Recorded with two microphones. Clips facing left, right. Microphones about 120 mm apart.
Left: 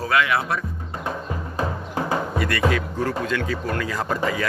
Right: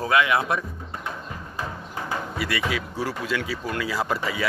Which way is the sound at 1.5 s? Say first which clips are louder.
Left 7 dB; 40° left (ahead or behind).